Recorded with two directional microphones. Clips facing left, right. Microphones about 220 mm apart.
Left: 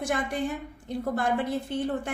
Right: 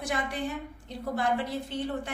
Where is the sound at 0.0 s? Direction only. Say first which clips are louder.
Left 3 dB; 50° left (ahead or behind).